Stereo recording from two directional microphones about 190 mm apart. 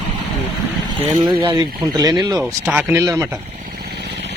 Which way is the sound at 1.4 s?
25° right (ahead or behind).